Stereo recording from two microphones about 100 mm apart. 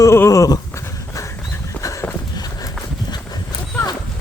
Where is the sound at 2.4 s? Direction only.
40° left (ahead or behind).